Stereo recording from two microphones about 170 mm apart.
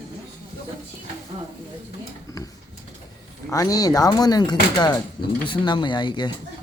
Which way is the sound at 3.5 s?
20° left (ahead or behind).